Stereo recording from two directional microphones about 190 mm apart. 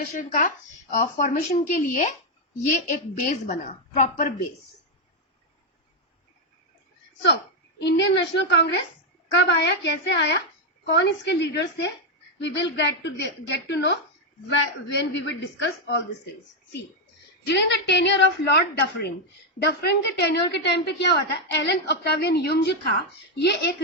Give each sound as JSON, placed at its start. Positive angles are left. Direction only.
{"t": 0.1, "sound": "speech", "side_deg": 40}
{"t": 7.8, "sound": "a woman's voice", "side_deg": 70}
{"t": 17.4, "sound": "a woman's voice", "side_deg": 65}